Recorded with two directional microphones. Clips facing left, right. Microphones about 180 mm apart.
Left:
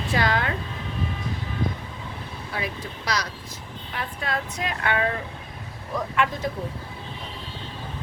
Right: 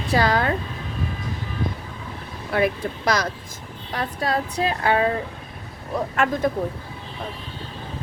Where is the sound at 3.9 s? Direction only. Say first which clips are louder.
Right 6 dB; 35° right (ahead or behind).